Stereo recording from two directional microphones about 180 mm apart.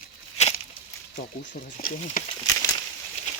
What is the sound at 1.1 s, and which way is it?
Speech, 60° left (ahead or behind).